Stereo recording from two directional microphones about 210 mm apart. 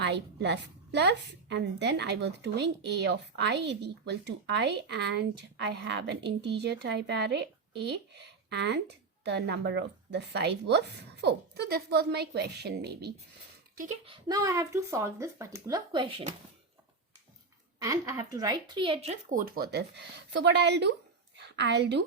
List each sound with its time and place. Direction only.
0.0 s a woman's voice: 55° right (ahead or behind)
13.7 s speech: 35° right (ahead or behind)
17.7 s speech: 15° right (ahead or behind); by 19.4 s 30° right (ahead or behind)
19.5 s a woman's voice: 45° right (ahead or behind)